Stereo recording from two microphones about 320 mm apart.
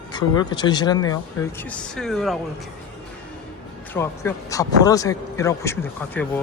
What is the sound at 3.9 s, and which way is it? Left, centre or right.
Speech, centre.